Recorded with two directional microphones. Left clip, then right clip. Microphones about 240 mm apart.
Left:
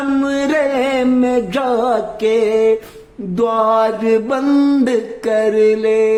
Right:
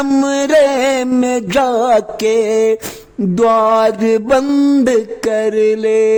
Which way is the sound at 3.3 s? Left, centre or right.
Right.